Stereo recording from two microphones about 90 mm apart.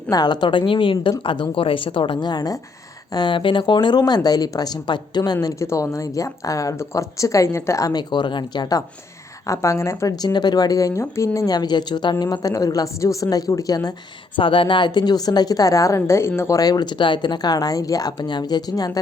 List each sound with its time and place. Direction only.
0.1 s a woman's voice: 50° left (ahead or behind)
8.1 s speech: 60° left (ahead or behind)
9.5 s a woman's voice: 35° left (ahead or behind)
10.1 s a woman's voice: 50° left (ahead or behind); by 11.3 s 30° left (ahead or behind)
11.3 s a woman's voice: 45° left (ahead or behind)
14.3 s a woman's voice: 70° left (ahead or behind); by 16.6 s 30° left (ahead or behind)
16.6 s a woman's voice: 50° left (ahead or behind)